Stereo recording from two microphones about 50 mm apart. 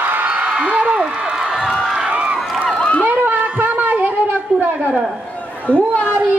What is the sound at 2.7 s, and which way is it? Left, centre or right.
Run, left.